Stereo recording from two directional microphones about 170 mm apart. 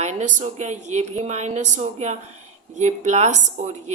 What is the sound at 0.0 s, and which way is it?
A woman's voice, 45° right (ahead or behind).